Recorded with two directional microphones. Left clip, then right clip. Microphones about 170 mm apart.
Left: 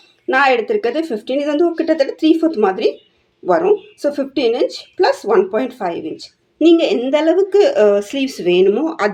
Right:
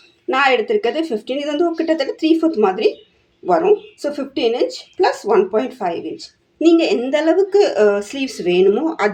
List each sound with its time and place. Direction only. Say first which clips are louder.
0.3 s speech: left 2 dB; 15° left (ahead or behind)